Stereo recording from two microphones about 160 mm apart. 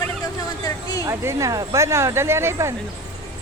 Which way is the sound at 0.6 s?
20° left (ahead or behind).